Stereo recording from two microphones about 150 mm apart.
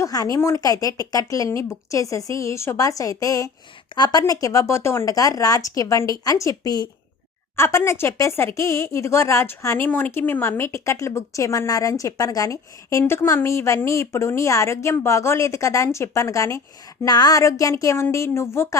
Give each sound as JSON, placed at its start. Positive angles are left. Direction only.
{"t": 0.0, "sound": "a woman's voice", "side_deg": 25}